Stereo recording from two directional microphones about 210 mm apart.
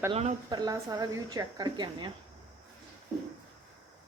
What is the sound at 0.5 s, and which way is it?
Speech, 15° right (ahead or behind).